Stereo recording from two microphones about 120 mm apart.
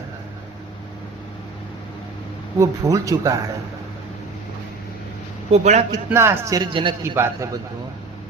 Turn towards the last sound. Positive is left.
turn(degrees=-20)  # may be behind; listen again after turning